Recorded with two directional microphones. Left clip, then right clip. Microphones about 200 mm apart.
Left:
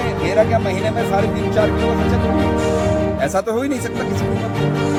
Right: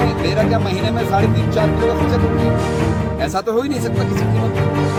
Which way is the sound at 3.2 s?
20° left (ahead or behind).